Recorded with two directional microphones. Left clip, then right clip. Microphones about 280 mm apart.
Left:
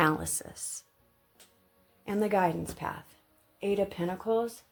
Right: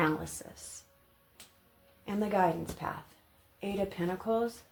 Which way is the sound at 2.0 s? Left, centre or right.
Left.